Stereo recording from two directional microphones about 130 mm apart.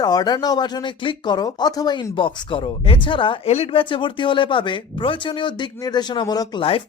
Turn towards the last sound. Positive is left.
turn(degrees=30)  # may be behind; listen again after turning